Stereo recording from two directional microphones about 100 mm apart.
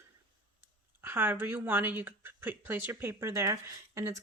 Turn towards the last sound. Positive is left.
turn(degrees=-30)  # may be behind; listen again after turning